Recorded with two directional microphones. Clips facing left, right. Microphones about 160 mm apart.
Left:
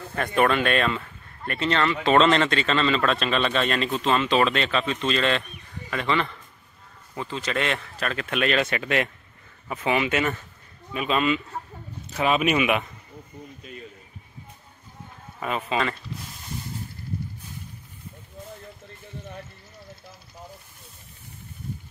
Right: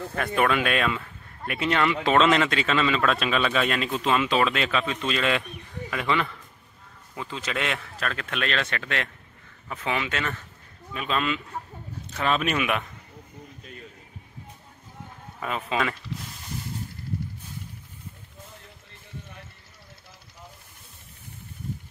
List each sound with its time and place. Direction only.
0.1 s speech: centre (ahead or behind)
15.4 s speech: centre (ahead or behind)